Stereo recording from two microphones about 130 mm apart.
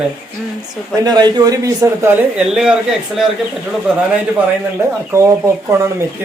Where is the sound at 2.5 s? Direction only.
5° right (ahead or behind).